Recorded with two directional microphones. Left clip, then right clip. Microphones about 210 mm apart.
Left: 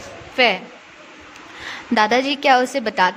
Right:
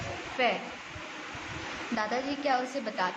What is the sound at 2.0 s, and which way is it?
A woman's voice, 55° left (ahead or behind).